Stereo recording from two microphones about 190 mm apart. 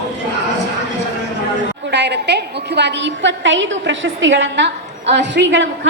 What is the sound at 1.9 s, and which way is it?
A woman's voice, 65° right (ahead or behind).